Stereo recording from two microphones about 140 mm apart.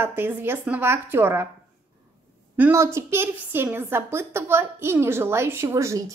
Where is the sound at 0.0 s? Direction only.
15° right (ahead or behind).